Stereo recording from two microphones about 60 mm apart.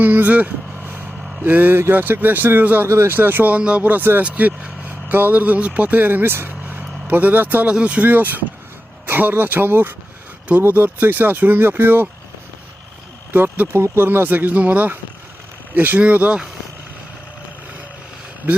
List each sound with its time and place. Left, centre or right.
0.0 s speech: right
0.9 s vehicle: right
1.9 s speech: right
2.9 s speech: right
3.2 s speech: right
3.6 s speech: centre; by 12.0 s right
13.3 s speech: right